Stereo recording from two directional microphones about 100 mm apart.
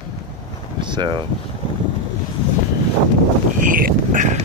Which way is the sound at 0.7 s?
50° right (ahead or behind).